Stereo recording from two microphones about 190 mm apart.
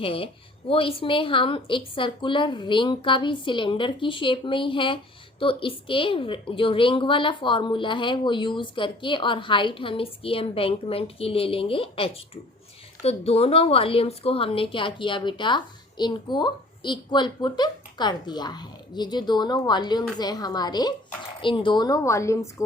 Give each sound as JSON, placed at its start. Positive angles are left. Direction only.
{"t": 0.0, "sound": "a woman's voice", "side_deg": 30}